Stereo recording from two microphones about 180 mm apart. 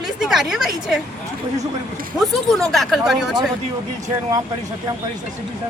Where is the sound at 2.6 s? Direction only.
Centre (ahead or behind).